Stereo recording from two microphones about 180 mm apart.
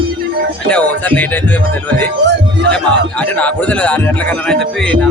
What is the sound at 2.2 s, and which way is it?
Music, 75° right (ahead or behind).